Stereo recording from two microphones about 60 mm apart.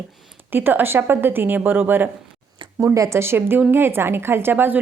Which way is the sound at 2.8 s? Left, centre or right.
Right.